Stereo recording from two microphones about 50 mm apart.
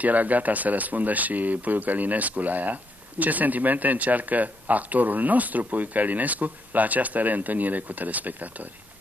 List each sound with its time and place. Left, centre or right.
0.0 s speech: right